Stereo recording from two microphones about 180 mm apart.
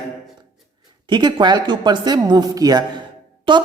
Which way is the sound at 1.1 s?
25° right (ahead or behind).